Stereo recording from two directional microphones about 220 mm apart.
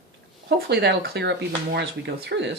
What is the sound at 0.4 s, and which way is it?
Speech, 50° right (ahead or behind).